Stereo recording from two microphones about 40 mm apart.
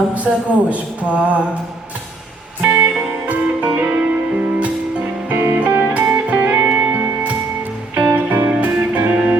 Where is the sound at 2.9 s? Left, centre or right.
Right.